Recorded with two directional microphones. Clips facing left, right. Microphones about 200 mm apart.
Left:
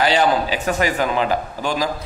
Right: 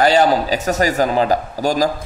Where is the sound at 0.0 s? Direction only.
40° right (ahead or behind).